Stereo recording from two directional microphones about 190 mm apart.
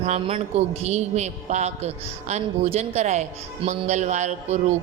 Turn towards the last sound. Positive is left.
turn(degrees=-35)  # may be behind; listen again after turning